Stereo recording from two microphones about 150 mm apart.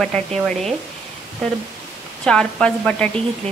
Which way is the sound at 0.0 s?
5° left (ahead or behind).